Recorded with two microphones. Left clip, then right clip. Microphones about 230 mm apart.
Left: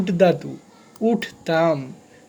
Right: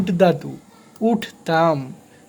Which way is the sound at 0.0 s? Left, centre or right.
Centre.